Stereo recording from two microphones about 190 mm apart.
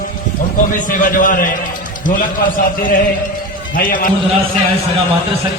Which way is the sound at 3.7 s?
45° left (ahead or behind).